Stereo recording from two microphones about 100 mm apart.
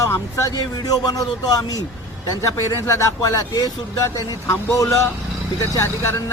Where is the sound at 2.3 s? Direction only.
30° left (ahead or behind).